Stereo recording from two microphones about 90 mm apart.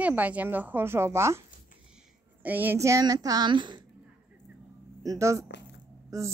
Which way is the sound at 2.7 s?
35° right (ahead or behind).